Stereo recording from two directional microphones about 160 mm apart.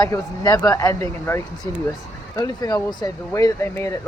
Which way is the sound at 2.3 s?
25° left (ahead or behind).